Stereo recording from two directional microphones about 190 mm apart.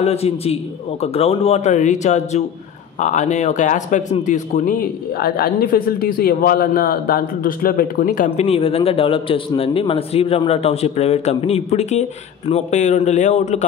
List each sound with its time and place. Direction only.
0.0 s a man's voice: 35° left (ahead or behind); by 8.3 s 50° left (ahead or behind)
8.3 s a man's voice: 30° left (ahead or behind)